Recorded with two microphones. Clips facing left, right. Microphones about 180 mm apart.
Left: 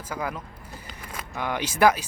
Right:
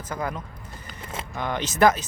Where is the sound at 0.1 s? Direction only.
10° left (ahead or behind).